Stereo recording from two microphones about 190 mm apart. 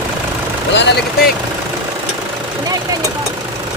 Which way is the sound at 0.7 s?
65° left (ahead or behind).